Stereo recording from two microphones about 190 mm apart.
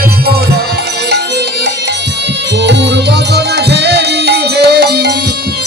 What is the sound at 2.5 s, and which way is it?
Music, 65° right (ahead or behind).